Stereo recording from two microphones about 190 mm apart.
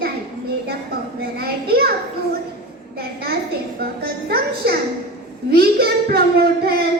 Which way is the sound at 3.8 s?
50° right (ahead or behind).